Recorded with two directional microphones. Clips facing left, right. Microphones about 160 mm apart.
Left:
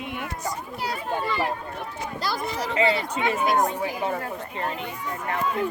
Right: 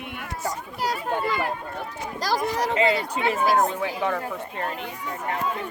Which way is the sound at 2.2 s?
40° right (ahead or behind).